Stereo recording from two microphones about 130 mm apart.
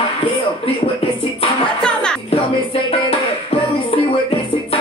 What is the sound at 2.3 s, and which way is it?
Music, 50° left (ahead or behind).